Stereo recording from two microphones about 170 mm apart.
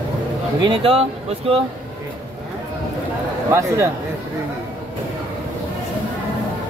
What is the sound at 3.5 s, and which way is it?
Speech, 15° right (ahead or behind).